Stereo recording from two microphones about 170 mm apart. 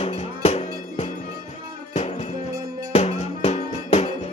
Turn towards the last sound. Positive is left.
turn(degrees=40)  # may be behind; listen again after turning